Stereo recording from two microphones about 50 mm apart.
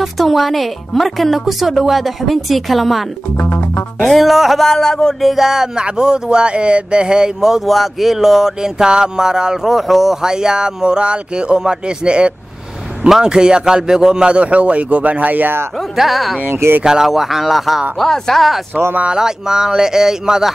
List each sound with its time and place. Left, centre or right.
0.0 s speech: centre
3.3 s music: left
4.0 s speech: centre
5.2 s a sound: centre
7.6 s a sound: centre
13.2 s speech: centre; by 15.6 s right
16.0 s speech: centre
16.4 s speech: right
16.8 s speech: centre
17.9 s speech: centre
19.1 s a sound: centre